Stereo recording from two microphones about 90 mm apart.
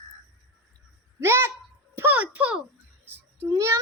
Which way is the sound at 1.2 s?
25° right (ahead or behind).